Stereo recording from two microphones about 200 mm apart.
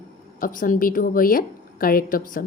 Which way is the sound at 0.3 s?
45° left (ahead or behind).